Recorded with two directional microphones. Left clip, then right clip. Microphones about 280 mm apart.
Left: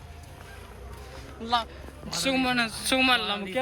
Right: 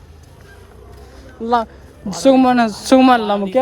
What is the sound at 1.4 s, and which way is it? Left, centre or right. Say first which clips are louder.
Speech: right 10 dB; right.